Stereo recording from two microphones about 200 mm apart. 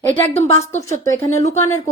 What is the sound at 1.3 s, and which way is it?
Speech, 35° left (ahead or behind).